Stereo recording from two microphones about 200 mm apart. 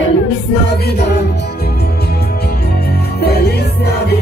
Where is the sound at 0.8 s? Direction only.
55° left (ahead or behind).